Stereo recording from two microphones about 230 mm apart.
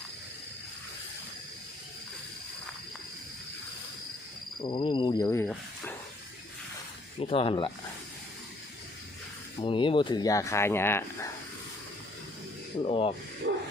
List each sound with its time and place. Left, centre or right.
4.6 s cricket: centre
7.2 s cricket: left
9.6 s speech: left
12.8 s cricket: left